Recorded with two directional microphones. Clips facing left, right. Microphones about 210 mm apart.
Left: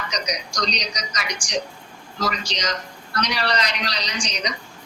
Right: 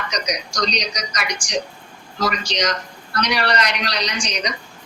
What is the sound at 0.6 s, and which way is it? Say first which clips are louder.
Speech: right 5 dB; 65° right (ahead or behind).